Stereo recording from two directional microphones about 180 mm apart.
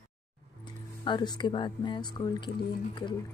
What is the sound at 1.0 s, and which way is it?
Speech, 25° left (ahead or behind).